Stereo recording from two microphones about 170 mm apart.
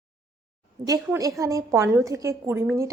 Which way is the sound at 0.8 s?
20° right (ahead or behind).